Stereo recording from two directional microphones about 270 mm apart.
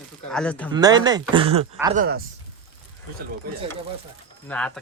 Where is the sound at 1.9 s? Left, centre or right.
Right.